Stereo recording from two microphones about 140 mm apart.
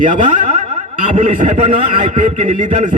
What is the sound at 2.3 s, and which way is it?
Speech, 60° right (ahead or behind).